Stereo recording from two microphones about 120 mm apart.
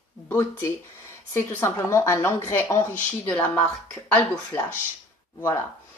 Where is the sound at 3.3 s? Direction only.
10° left (ahead or behind).